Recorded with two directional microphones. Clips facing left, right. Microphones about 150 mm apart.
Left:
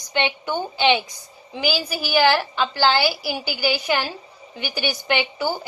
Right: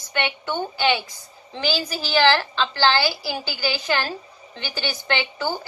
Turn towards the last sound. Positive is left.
turn(degrees=10)  # may be behind; listen again after turning